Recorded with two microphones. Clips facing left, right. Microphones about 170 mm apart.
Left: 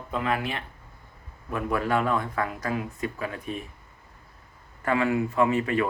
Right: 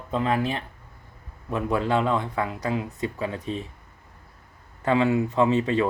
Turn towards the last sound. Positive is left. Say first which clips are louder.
# right 2 dB
turn(degrees=-20)  # may be behind; listen again after turning